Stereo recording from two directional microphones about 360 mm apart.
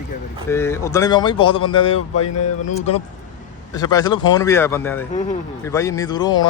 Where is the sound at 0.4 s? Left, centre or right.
Centre.